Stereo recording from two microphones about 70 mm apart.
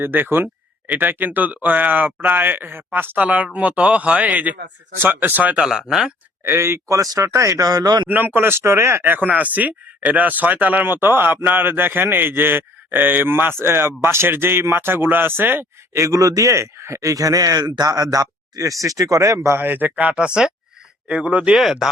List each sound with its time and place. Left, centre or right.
0.0 s speech: right
3.2 s speech: centre
5.5 s speech: centre
6.4 s speech: right
6.8 s speech: right
8.0 s speech: right
16.0 s a man's voice: right
19.4 s speech: right
21.5 s speech: centre